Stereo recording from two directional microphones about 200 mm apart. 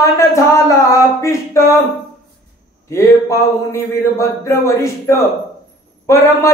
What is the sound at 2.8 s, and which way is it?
Speech, 15° left (ahead or behind).